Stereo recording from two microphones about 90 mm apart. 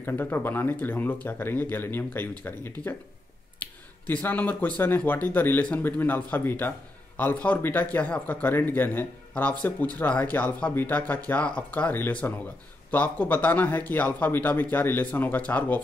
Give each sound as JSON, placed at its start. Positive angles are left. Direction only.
{"t": 0.0, "sound": "speech", "side_deg": 25}
{"t": 3.6, "sound": "a sound", "side_deg": 15}
{"t": 4.1, "sound": "speech", "side_deg": 20}